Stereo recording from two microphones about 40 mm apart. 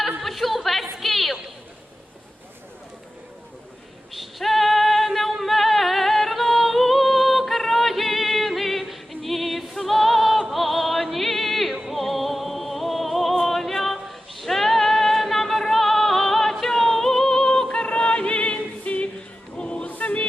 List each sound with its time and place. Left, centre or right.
0.2 s a sound: centre
4.1 s female singing: centre
11.8 s music: centre; by 19.0 s left
19.5 s choir: left
20.0 s music: left